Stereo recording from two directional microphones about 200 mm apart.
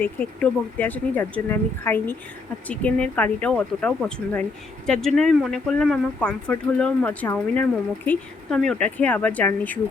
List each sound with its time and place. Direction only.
0.0 s speech: 5° left (ahead or behind)